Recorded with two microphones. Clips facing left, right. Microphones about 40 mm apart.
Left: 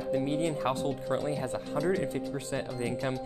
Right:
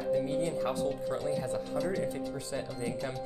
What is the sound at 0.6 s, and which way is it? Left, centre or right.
Speech, left.